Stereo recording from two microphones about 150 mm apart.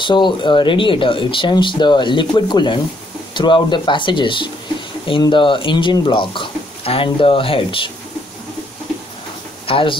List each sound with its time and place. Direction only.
0.0 s speech: 30° left (ahead or behind)
9.7 s speech: 35° left (ahead or behind)